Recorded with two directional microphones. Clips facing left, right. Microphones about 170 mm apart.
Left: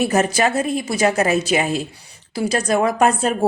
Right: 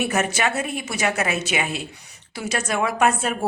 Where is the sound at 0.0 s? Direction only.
35° left (ahead or behind).